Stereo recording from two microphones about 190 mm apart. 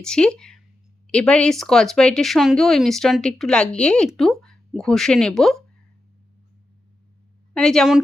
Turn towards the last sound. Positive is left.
turn(degrees=0)  # may be behind; listen again after turning